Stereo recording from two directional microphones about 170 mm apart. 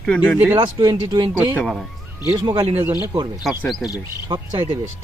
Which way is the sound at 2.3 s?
25° right (ahead or behind).